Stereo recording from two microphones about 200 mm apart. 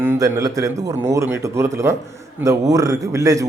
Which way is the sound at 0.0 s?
15° right (ahead or behind).